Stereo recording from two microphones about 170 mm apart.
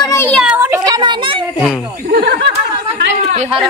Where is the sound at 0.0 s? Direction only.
15° left (ahead or behind).